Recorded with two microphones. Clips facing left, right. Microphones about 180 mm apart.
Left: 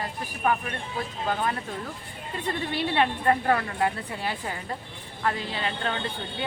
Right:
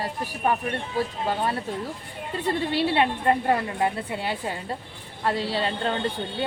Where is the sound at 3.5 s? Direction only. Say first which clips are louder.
Right 1 dB; 25° right (ahead or behind).